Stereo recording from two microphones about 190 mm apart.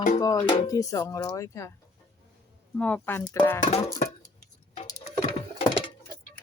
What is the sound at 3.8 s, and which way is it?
Music, 15° left (ahead or behind).